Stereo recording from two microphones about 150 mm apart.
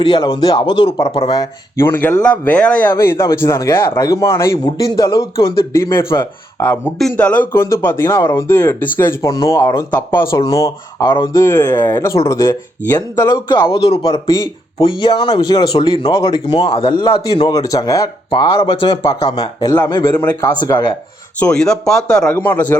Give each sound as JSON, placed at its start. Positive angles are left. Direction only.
{"t": 0.0, "sound": "speech", "side_deg": 30}
{"t": 1.8, "sound": "speech", "side_deg": 10}
{"t": 21.3, "sound": "speech", "side_deg": 5}